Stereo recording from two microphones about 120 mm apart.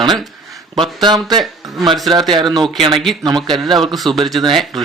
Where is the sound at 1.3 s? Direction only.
Centre (ahead or behind).